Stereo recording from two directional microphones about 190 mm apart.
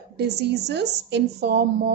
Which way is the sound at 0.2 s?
60° right (ahead or behind).